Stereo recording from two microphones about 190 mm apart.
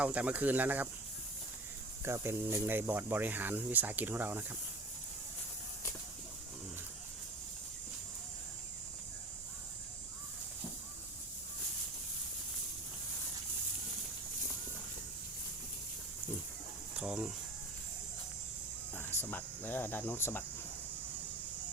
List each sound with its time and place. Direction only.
0.0 s speech: 5° right (ahead or behind)
2.0 s speech: 15° right (ahead or behind)
17.0 s speech: 5° right (ahead or behind)
18.9 s speech: 10° left (ahead or behind)